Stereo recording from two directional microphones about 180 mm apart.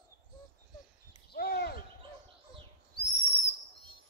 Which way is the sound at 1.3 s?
60° left (ahead or behind).